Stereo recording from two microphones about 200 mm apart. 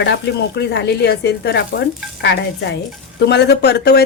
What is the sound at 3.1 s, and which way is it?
Speech, 55° left (ahead or behind).